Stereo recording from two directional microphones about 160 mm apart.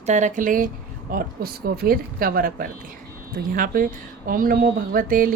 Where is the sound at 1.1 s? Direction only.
70° right (ahead or behind).